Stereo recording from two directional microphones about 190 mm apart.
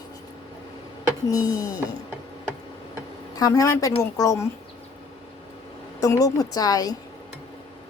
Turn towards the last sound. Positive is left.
turn(degrees=20)  # may be behind; listen again after turning